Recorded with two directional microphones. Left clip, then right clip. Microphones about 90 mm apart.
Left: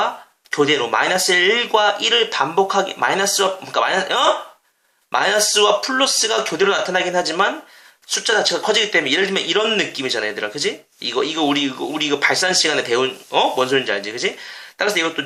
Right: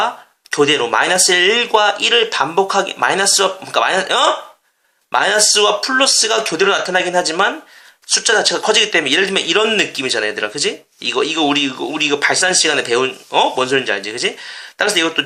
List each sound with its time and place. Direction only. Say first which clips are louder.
0.5 s speech: right 3 dB; 35° right (ahead or behind)